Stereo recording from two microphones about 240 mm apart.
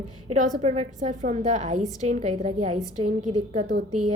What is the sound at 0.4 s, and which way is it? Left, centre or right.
A woman's voice, right.